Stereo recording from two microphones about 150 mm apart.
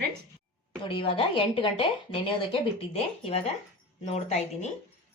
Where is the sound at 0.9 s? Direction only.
35° left (ahead or behind).